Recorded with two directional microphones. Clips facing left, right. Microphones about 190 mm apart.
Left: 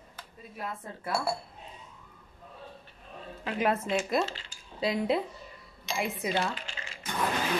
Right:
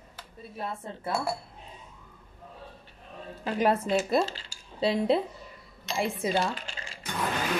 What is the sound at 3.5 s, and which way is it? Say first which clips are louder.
Speech: right 3 dB; 35° right (ahead or behind).